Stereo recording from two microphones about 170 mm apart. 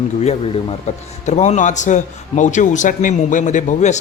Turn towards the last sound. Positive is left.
turn(degrees=45)  # may be behind; listen again after turning